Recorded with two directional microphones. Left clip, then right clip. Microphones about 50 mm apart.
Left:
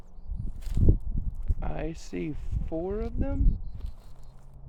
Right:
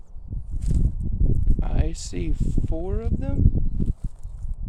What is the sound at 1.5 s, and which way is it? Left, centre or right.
Speech, right.